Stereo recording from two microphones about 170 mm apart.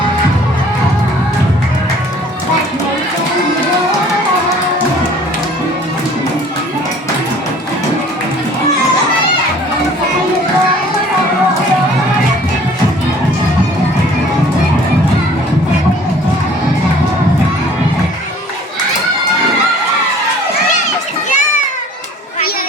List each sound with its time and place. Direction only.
21.2 s children playing: 45° left (ahead or behind)